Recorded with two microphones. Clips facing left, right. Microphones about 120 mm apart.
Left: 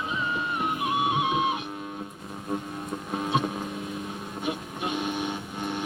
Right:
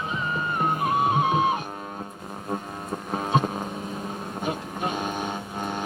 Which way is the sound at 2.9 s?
40° right (ahead or behind).